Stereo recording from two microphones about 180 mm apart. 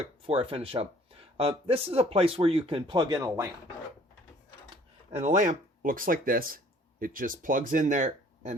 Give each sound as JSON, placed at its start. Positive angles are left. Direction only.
{"t": 0.3, "sound": "speech", "side_deg": -30}
{"t": 5.1, "sound": "speech", "side_deg": -40}